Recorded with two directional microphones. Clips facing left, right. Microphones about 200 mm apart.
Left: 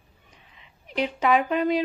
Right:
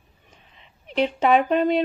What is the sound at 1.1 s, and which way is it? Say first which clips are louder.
Speech: right 3 dB; 25° right (ahead or behind).